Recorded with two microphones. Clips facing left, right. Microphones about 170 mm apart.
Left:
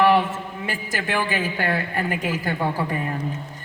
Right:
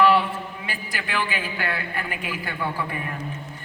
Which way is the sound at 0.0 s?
45° left (ahead or behind).